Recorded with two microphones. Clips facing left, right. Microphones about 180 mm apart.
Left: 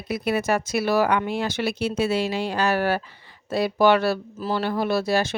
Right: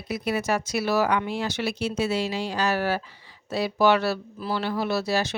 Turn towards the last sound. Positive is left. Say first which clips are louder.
# left 3 dB
turn(degrees=50)  # may be behind; listen again after turning